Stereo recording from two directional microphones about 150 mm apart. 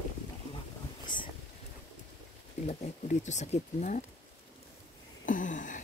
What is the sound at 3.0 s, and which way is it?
Speech, 50° left (ahead or behind).